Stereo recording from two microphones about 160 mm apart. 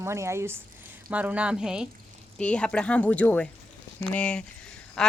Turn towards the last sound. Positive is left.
turn(degrees=5)  # may be behind; listen again after turning